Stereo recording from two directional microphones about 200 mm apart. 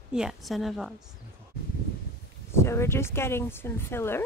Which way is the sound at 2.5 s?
15° left (ahead or behind).